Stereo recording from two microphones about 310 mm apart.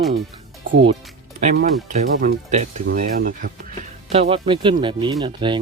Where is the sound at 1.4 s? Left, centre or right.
Right.